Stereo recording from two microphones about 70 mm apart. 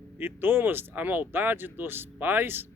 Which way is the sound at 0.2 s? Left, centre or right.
Right.